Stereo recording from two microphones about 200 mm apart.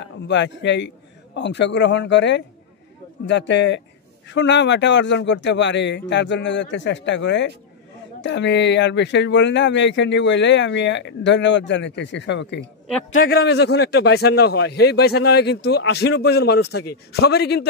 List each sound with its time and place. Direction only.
0.0 s a man's voice: 60° left (ahead or behind)
13.1 s a man's voice: 50° left (ahead or behind)